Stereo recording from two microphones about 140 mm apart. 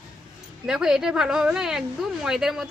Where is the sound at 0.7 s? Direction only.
5° right (ahead or behind).